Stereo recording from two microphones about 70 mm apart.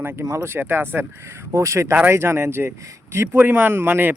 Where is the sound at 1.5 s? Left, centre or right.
Right.